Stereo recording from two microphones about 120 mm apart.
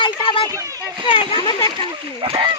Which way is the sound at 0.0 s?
40° left (ahead or behind).